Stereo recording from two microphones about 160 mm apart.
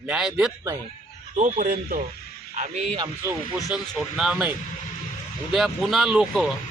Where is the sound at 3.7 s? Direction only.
5° right (ahead or behind).